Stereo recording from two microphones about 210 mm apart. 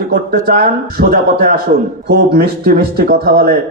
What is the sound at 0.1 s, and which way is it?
Speech, 50° right (ahead or behind).